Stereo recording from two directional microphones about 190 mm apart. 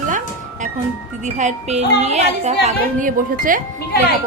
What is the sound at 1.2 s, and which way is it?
A woman's voice, 40° right (ahead or behind).